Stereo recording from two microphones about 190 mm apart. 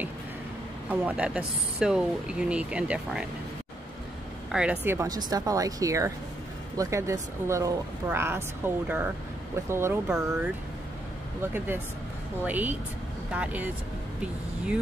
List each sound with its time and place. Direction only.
0.8 s speech: 5° right (ahead or behind)
4.5 s speech: 5° right (ahead or behind)
11.5 s speech: 10° right (ahead or behind)